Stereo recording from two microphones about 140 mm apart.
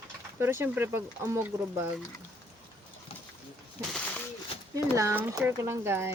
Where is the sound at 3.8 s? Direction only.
20° right (ahead or behind).